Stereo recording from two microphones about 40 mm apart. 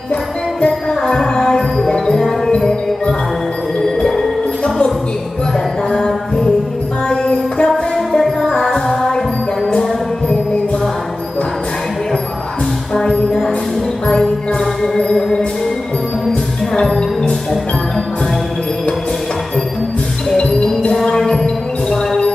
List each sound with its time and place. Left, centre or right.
0.1 s music: left
0.8 s music: centre
4.6 s music: left
5.9 s mantra: centre
7.1 s music: centre
12.9 s music: centre
15.1 s music: centre
16.7 s music: centre
20.3 s music: centre